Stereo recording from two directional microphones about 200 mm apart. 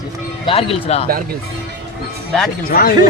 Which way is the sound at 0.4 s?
30° left (ahead or behind).